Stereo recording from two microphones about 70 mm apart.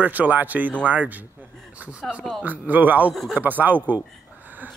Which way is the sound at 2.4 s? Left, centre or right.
Right.